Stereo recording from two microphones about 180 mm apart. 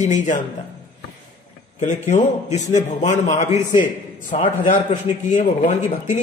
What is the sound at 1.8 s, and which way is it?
A man's voice, 40° left (ahead or behind).